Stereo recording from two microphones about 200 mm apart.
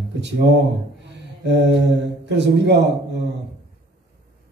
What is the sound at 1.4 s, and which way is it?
Speech, 60° right (ahead or behind).